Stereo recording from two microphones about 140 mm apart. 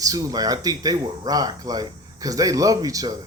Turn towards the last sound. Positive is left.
turn(degrees=-25)  # may be behind; listen again after turning